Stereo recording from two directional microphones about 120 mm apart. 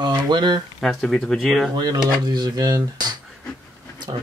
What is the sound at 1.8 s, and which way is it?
Speech, 35° right (ahead or behind).